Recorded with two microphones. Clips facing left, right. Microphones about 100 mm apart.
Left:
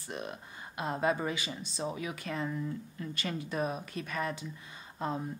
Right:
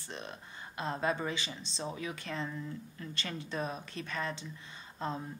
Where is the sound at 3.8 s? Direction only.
30° right (ahead or behind).